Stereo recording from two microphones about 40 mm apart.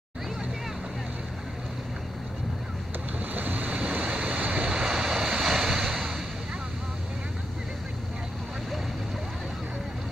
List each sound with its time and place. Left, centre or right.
3.3 s boat: right
4.0 s waves: right
4.6 s waves: centre